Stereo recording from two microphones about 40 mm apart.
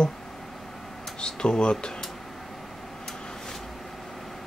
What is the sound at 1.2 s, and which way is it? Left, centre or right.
Speech, centre.